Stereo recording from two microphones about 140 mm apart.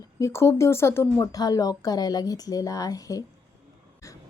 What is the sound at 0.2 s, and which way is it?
Speech, 20° left (ahead or behind).